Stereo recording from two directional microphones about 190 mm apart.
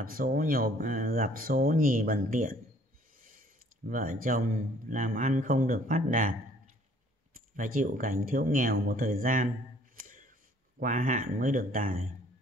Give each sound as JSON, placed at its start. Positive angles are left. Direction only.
{"t": 0.0, "sound": "speech", "side_deg": -50}
{"t": 3.2, "sound": "a sound", "side_deg": -45}
{"t": 3.9, "sound": "speech", "side_deg": -45}
{"t": 7.3, "sound": "speech", "side_deg": -45}
{"t": 9.9, "sound": "a sound", "side_deg": -45}
{"t": 10.8, "sound": "speech", "side_deg": -45}